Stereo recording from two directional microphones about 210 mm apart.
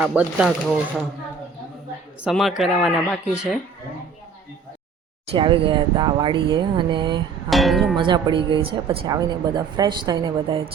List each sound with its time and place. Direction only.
0.0 s speech: 5° right (ahead or behind)
2.2 s speech: centre (ahead or behind)
5.3 s speech: 25° right (ahead or behind)
7.5 s speech: centre (ahead or behind)
7.9 s speech: 25° right (ahead or behind)